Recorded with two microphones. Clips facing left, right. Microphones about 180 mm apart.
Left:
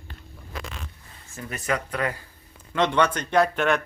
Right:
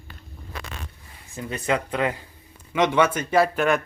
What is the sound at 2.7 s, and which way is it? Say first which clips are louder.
Speech: right 2 dB; 10° right (ahead or behind).